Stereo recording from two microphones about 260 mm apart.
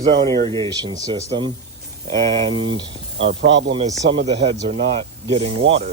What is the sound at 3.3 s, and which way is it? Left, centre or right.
Speech, right.